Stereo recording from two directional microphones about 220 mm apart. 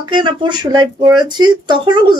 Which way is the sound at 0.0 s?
20° right (ahead or behind).